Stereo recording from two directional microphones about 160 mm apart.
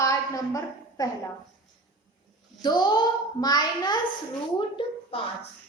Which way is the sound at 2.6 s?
25° left (ahead or behind).